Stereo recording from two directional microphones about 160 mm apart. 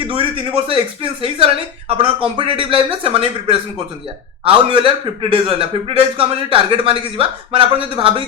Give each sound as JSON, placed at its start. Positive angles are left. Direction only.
{"t": 0.2, "sound": "a man's voice", "side_deg": -35}